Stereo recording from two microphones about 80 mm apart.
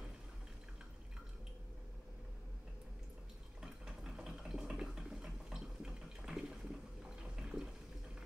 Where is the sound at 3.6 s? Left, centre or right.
Centre.